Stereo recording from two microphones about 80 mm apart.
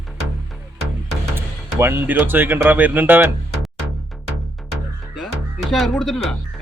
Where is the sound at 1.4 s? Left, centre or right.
Right.